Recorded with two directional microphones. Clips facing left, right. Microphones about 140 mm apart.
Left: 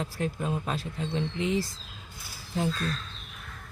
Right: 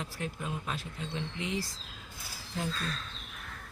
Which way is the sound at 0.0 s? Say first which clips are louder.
Left 7 dB; 35° left (ahead or behind).